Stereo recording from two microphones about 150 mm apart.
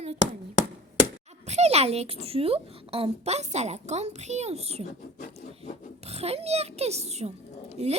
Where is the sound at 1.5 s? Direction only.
45° right (ahead or behind).